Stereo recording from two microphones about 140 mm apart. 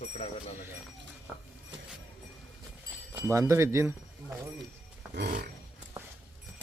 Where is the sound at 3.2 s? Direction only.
15° right (ahead or behind).